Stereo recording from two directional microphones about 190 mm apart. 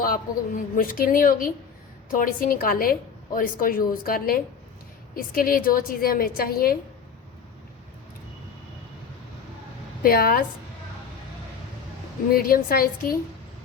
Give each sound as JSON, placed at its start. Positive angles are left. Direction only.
{"t": 0.0, "sound": "a woman's voice", "side_deg": 50}
{"t": 10.0, "sound": "a woman's voice", "side_deg": 50}
{"t": 12.3, "sound": "a woman's voice", "side_deg": 50}